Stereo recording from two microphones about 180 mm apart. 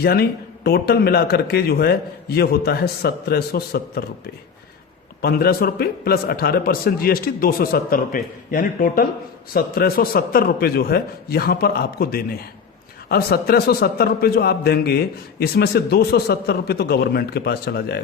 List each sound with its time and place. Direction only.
0.0 s a man's voice: 60° left (ahead or behind)
5.2 s a man's voice: 60° left (ahead or behind)